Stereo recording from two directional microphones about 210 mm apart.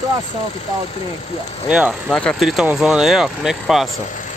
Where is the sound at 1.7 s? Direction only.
5° right (ahead or behind).